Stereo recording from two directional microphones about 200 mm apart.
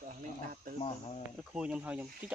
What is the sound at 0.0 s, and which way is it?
Cricket, 45° right (ahead or behind).